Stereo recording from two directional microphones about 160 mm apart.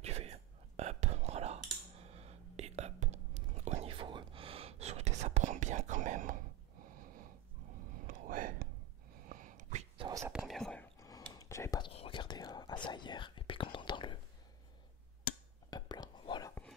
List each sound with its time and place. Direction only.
0.0 s whispering: 40° right (ahead or behind)
8.1 s whispering: 60° right (ahead or behind)
9.2 s a sound: 60° right (ahead or behind)
10.3 s whispering: centre (ahead or behind)
11.0 s a sound: 20° left (ahead or behind)
11.3 s whispering: 20° left (ahead or behind)
11.9 s whispering: 35° left (ahead or behind)
15.7 s whispering: 25° left (ahead or behind)